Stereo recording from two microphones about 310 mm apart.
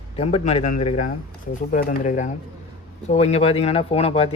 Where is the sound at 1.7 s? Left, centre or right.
Left.